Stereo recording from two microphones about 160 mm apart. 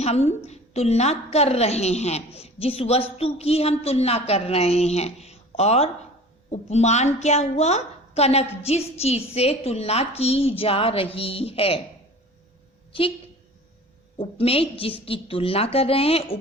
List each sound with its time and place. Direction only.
0.0 s a woman's voice: 40° left (ahead or behind)
12.9 s a woman's voice: 35° left (ahead or behind)
14.2 s a woman's voice: 35° left (ahead or behind)